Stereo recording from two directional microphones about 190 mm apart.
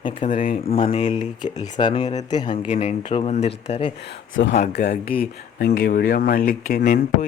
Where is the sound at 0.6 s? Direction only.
30° left (ahead or behind).